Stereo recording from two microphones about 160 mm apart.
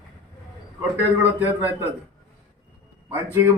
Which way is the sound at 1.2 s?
15° right (ahead or behind).